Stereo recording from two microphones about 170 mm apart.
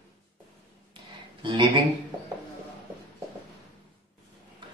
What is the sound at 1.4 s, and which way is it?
Speech, 30° right (ahead or behind).